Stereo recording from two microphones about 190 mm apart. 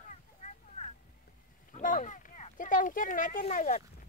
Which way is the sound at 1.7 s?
40° left (ahead or behind).